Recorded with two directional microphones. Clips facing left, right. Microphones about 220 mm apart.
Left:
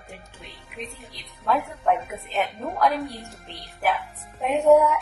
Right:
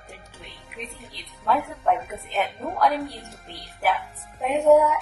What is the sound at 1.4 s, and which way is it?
A woman's voice, centre (ahead or behind).